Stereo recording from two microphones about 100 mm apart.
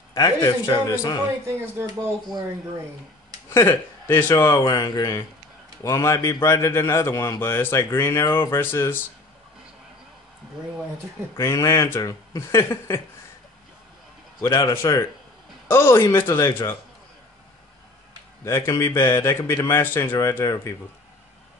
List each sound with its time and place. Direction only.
0.1 s a man's voice: 45° left (ahead or behind)
1.9 s speech: 40° right (ahead or behind)
3.4 s a man's voice: 25° left (ahead or behind)
4.6 s a man's voice: 45° left (ahead or behind); by 9.0 s 25° left (ahead or behind)
11.3 s a man's voice: 30° left (ahead or behind)
14.4 s speech: 40° left (ahead or behind)
14.8 s a man's voice: 25° left (ahead or behind)
18.4 s a man's voice: 25° left (ahead or behind)